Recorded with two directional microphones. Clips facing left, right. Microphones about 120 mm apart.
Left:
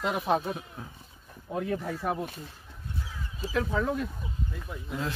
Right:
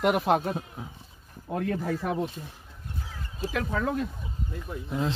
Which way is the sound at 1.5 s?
65° right (ahead or behind).